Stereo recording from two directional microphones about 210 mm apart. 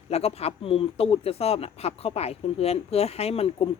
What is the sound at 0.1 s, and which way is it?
Speech, 30° left (ahead or behind).